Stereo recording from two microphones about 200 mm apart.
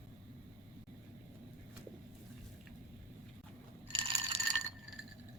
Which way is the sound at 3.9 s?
25° right (ahead or behind).